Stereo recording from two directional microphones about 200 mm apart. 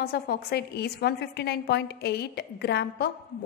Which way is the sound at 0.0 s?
50° left (ahead or behind).